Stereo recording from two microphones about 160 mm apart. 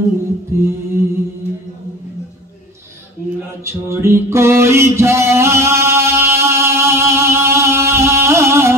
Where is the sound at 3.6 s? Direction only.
15° right (ahead or behind).